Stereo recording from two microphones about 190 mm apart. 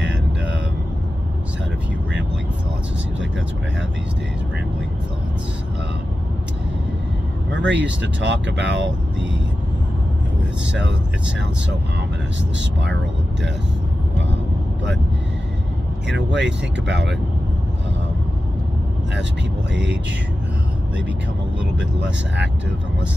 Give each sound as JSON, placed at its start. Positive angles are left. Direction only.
{"t": 7.5, "sound": "speech", "side_deg": -70}
{"t": 16.1, "sound": "speech", "side_deg": -70}
{"t": 19.7, "sound": "speech", "side_deg": -70}